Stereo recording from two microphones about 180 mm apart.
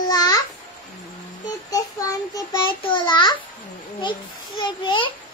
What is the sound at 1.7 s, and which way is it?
Child singing, 20° left (ahead or behind).